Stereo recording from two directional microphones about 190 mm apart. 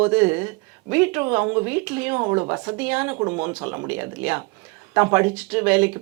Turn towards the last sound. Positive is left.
turn(degrees=-10)  # may be behind; listen again after turning